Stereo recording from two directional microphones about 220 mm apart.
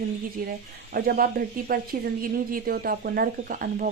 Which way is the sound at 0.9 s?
40° right (ahead or behind).